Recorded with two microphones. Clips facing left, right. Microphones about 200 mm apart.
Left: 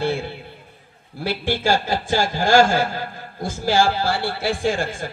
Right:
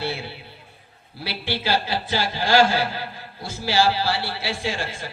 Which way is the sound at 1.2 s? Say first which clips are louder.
Left 6 dB; 45° left (ahead or behind).